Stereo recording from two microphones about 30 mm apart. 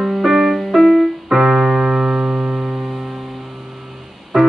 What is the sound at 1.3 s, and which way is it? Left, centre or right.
Keyboard, centre.